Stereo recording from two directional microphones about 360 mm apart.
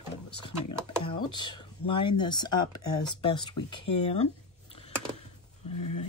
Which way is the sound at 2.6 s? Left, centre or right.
Left.